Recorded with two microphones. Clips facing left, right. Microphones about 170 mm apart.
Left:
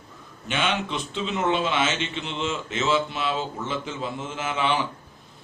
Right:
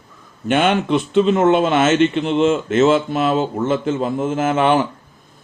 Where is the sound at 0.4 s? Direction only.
55° right (ahead or behind).